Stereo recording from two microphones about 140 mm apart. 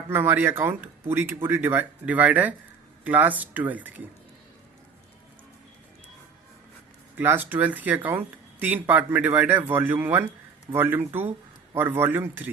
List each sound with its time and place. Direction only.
0.1 s speech: 15° right (ahead or behind)
7.2 s speech: 15° right (ahead or behind)